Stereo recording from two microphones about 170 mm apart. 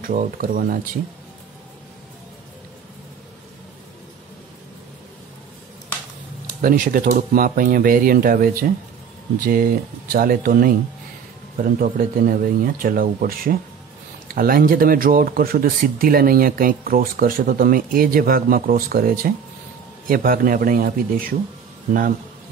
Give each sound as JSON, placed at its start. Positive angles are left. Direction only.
{"t": 0.0, "sound": "speech", "side_deg": -55}
{"t": 6.6, "sound": "speech", "side_deg": -50}